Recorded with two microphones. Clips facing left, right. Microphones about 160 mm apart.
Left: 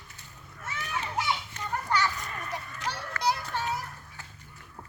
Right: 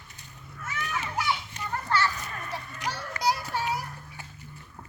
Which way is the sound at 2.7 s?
15° right (ahead or behind).